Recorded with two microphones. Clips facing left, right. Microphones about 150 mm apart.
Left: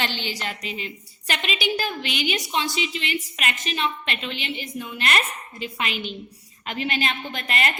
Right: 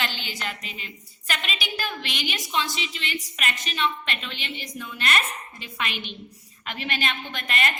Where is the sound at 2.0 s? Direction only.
35° right (ahead or behind).